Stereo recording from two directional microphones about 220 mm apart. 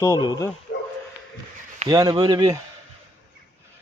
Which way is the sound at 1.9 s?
20° right (ahead or behind).